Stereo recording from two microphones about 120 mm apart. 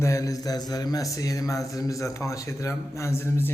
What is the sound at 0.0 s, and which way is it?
Speech, 25° left (ahead or behind).